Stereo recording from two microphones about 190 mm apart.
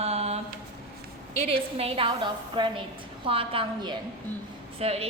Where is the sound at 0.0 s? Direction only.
35° right (ahead or behind).